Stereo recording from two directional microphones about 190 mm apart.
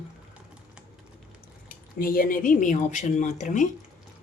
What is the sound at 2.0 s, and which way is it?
Speech, 50° left (ahead or behind).